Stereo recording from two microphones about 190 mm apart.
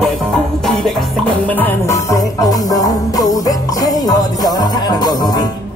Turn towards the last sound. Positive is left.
turn(degrees=20)  # may be behind; listen again after turning